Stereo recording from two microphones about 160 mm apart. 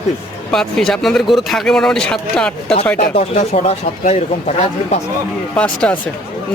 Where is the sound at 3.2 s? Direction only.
50° left (ahead or behind).